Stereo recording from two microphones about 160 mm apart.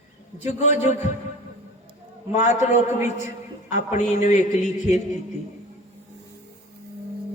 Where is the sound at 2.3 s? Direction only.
45° left (ahead or behind).